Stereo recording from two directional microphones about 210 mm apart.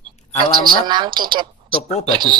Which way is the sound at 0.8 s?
20° right (ahead or behind).